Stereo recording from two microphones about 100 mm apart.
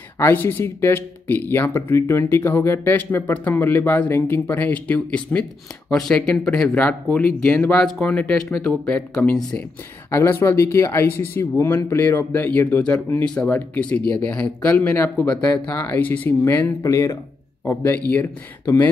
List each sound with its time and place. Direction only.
0.2 s speech: 20° left (ahead or behind)
10.1 s speech: 25° left (ahead or behind)